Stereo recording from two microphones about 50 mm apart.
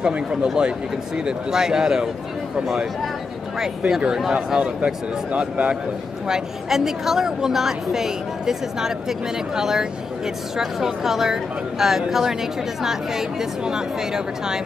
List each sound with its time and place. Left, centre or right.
0.1 s a woman's voice: centre
3.5 s a woman's voice: centre
6.2 s a woman's voice: centre